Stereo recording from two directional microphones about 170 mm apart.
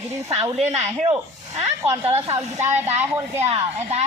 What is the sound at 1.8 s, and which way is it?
Speech, 15° right (ahead or behind).